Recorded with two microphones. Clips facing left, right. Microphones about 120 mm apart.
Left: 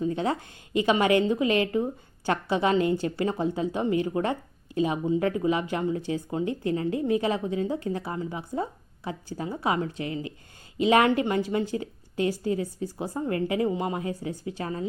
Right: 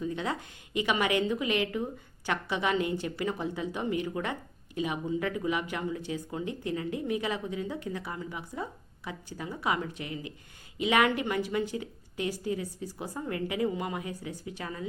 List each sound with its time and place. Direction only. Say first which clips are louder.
0.0 s a woman's voice: left 6 dB; 35° left (ahead or behind)